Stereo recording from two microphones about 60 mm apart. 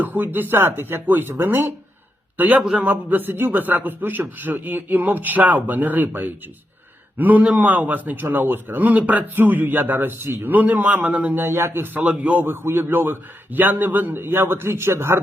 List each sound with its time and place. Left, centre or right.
0.0 s a man's voice: right
2.7 s a man's voice: right
11.3 s a man's voice: right
11.9 s a man's voice: right
12.5 s a man's voice: right